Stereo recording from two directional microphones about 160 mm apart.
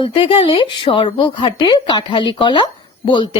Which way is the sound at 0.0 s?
35° left (ahead or behind).